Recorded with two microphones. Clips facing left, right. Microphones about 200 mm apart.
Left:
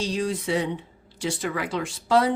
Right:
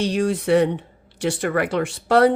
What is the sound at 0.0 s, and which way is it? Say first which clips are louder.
Speech: right 5 dB; 65° right (ahead or behind).